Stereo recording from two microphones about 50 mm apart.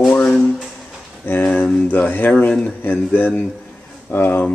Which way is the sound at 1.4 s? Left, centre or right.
Left.